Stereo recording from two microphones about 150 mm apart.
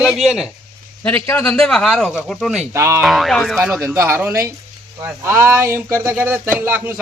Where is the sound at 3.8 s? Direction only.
20° right (ahead or behind).